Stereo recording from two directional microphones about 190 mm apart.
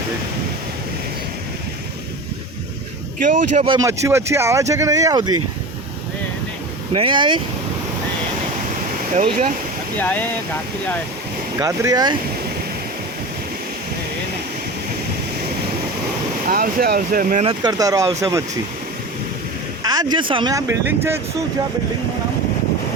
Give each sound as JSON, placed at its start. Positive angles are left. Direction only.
{"t": 3.2, "sound": "speech", "side_deg": -40}
{"t": 3.7, "sound": "speech", "side_deg": -15}
{"t": 6.9, "sound": "speech", "side_deg": -25}
{"t": 9.1, "sound": "speech", "side_deg": -40}
{"t": 10.0, "sound": "speech", "side_deg": 10}
{"t": 11.6, "sound": "speech", "side_deg": -20}
{"t": 16.5, "sound": "speech", "side_deg": -50}
{"t": 17.4, "sound": "speech", "side_deg": -25}
{"t": 19.8, "sound": "speech", "side_deg": -20}